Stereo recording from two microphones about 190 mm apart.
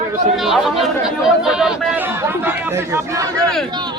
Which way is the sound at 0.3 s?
Centre (ahead or behind).